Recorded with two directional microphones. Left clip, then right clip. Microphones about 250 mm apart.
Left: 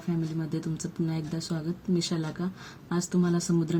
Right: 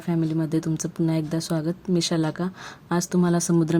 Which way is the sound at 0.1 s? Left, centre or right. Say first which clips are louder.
Right 8 dB; right.